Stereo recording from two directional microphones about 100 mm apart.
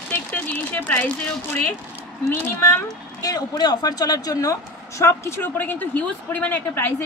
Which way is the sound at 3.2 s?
40° left (ahead or behind).